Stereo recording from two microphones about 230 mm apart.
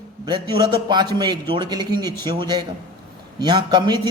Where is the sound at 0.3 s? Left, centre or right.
Centre.